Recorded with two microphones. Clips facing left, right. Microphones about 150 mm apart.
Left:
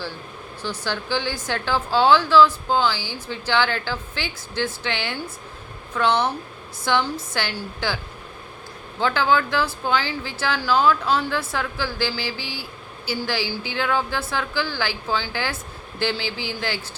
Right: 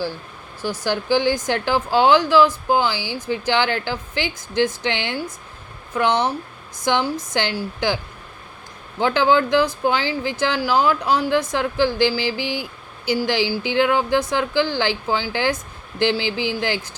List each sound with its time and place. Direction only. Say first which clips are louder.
0.6 s a woman's voice: right 5 dB; 10° right (ahead or behind)
9.0 s a woman's voice: right 3 dB; 15° right (ahead or behind)